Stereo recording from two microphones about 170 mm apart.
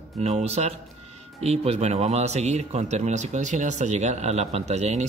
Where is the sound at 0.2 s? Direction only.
40° right (ahead or behind).